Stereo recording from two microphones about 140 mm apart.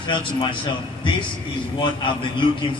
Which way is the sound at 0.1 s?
35° left (ahead or behind).